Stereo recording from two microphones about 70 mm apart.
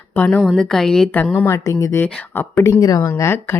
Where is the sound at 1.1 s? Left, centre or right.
Left.